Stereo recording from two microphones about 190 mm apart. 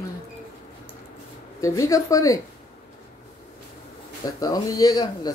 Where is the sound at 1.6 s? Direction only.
15° left (ahead or behind).